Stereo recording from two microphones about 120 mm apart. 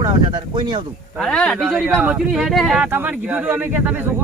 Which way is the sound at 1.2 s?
5° left (ahead or behind).